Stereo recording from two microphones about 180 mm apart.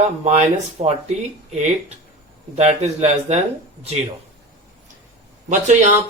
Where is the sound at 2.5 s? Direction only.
35° right (ahead or behind).